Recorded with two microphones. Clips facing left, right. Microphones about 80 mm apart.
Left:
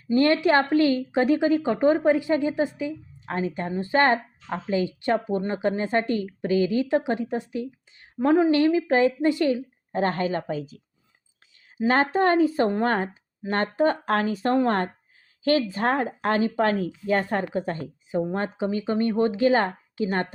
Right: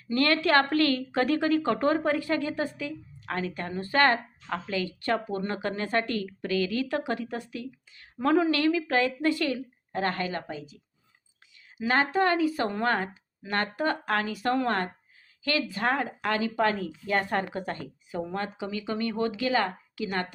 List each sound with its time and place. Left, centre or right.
0.1 s speech: left
11.8 s speech: left
17.1 s speech: left